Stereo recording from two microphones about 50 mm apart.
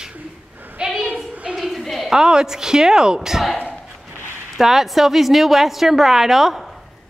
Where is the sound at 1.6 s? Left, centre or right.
Centre.